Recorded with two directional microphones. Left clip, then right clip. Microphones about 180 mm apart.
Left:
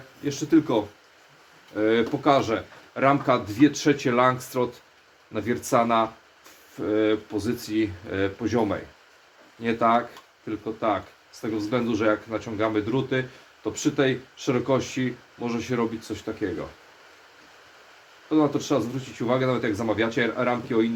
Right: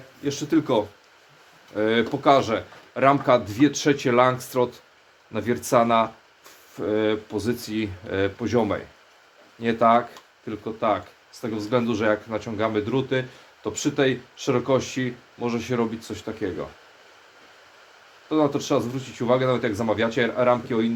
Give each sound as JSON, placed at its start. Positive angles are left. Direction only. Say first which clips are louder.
{"t": 0.2, "sound": "speech", "louder": "left 1 dB", "side_deg": -40}
{"t": 18.3, "sound": "speech", "louder": "right 1 dB", "side_deg": -40}